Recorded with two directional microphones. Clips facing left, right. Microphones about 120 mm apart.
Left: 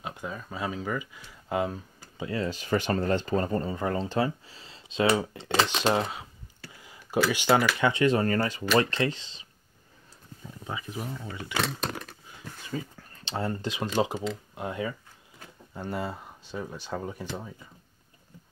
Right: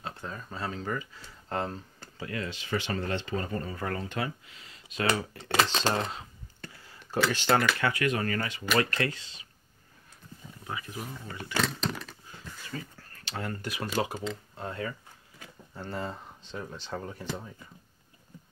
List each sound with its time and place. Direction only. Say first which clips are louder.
0.0 s speech: left 3 dB; 15° left (ahead or behind)
2.3 s speech: left 5 dB; 40° left (ahead or behind)
5.7 s speech: left 3 dB; 15° left (ahead or behind); by 8.6 s 35° left (ahead or behind)
8.7 s speech: left 3 dB; 25° left (ahead or behind)
10.6 s speech: left 2 dB; 20° left (ahead or behind)
12.7 s speech: left 5 dB; 10° left (ahead or behind)
13.1 s speech: left 5 dB; 25° left (ahead or behind)